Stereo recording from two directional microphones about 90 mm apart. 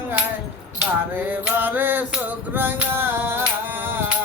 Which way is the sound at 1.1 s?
20° right (ahead or behind).